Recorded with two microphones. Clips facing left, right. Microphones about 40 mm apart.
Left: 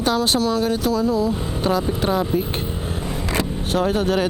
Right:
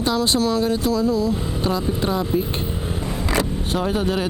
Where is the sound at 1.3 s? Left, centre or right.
Centre.